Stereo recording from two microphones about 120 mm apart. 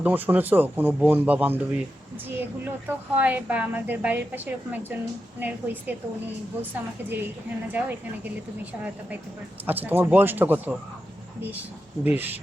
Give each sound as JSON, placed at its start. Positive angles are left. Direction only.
{"t": 0.0, "sound": "a woman's voice", "side_deg": -15}
{"t": 7.7, "sound": "a woman's voice", "side_deg": -15}
{"t": 9.6, "sound": "a woman's voice", "side_deg": -15}
{"t": 12.0, "sound": "a woman's voice", "side_deg": -15}